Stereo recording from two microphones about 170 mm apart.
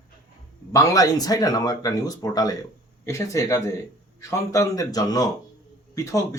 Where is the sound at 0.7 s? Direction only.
20° left (ahead or behind).